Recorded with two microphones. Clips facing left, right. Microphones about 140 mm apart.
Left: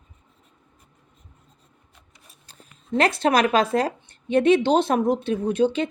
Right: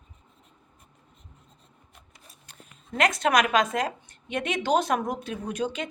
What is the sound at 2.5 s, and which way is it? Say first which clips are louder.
Speech: left 11 dB; 30° left (ahead or behind).